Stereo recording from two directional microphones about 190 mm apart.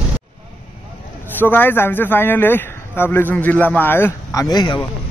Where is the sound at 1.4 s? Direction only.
10° left (ahead or behind).